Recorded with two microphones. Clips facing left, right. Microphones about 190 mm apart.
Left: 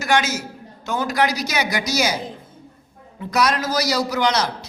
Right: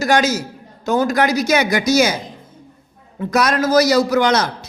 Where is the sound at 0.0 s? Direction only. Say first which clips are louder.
Right 4 dB; 40° right (ahead or behind).